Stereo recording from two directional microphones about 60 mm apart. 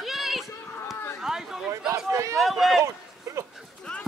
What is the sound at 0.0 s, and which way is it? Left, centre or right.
Run, centre.